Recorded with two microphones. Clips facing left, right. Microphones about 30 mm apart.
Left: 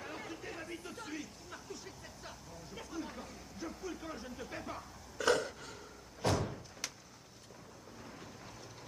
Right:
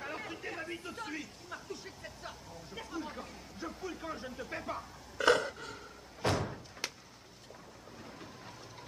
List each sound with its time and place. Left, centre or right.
0.0 s speech: centre
5.2 s a sound: centre
6.2 s door: centre